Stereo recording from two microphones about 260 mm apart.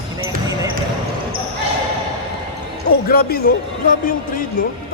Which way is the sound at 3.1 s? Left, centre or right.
Left.